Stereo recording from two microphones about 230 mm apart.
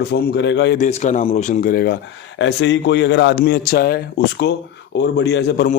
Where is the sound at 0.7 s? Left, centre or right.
Left.